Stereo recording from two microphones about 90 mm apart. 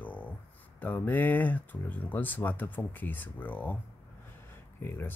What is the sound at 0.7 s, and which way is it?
Speech, 20° left (ahead or behind).